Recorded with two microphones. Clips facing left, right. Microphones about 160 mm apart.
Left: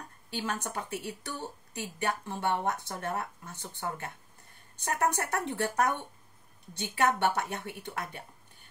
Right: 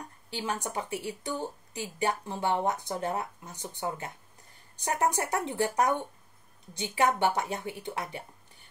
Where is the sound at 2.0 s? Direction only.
15° right (ahead or behind).